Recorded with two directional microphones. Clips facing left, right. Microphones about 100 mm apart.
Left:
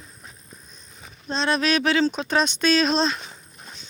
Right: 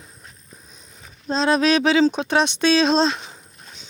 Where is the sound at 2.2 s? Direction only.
75° right (ahead or behind).